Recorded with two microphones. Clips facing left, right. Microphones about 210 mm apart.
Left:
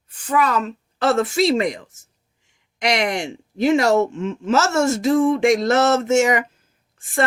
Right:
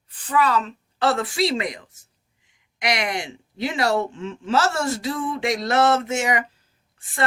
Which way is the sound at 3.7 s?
45° left (ahead or behind).